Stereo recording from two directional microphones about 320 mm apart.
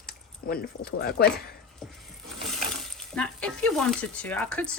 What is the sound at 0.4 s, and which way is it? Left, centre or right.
Speech, left.